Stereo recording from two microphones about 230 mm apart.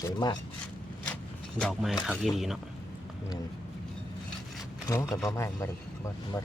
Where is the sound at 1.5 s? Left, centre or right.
Centre.